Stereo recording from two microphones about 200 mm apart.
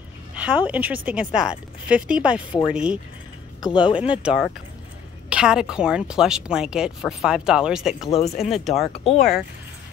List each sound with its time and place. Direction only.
0.3 s speech: 5° right (ahead or behind)
3.6 s speech: 25° left (ahead or behind)
4.1 s speech: 5° right (ahead or behind)